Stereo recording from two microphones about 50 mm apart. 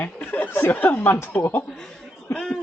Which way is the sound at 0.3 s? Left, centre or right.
Left.